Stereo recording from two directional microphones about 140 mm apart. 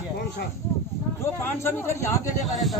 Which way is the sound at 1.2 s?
15° left (ahead or behind).